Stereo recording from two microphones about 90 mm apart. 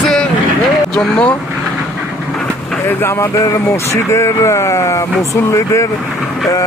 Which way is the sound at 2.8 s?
25° left (ahead or behind).